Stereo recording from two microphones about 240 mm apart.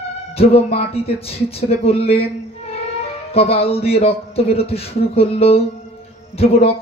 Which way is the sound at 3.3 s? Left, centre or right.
Left.